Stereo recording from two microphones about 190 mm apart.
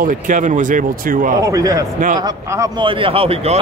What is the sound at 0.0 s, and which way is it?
Speech, 40° right (ahead or behind).